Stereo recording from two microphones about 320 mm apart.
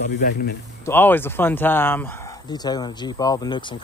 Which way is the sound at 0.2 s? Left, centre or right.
Left.